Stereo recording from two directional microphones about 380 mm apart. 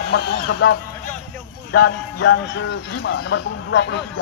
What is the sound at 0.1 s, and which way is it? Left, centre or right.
Speech, left.